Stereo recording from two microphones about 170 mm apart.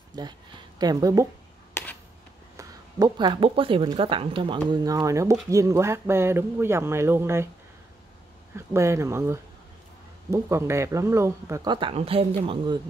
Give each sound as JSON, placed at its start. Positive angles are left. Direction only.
{"t": 0.1, "sound": "speech", "side_deg": -25}
{"t": 2.5, "sound": "speech", "side_deg": -25}
{"t": 8.5, "sound": "speech", "side_deg": -15}
{"t": 12.4, "sound": "speech", "side_deg": -25}